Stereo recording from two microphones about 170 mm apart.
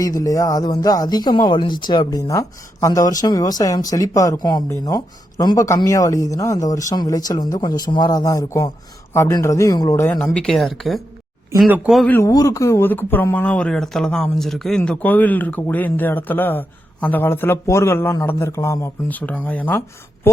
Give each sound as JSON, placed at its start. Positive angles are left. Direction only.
{"t": 0.2, "sound": "speech", "side_deg": 20}
{"t": 12.0, "sound": "speech", "side_deg": 15}